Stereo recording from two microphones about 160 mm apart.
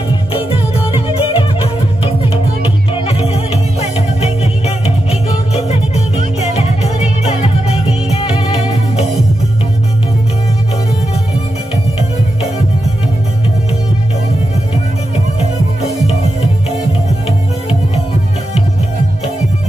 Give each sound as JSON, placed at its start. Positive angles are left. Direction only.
{"t": 0.3, "sound": "music", "side_deg": 35}
{"t": 15.8, "sound": "music", "side_deg": 40}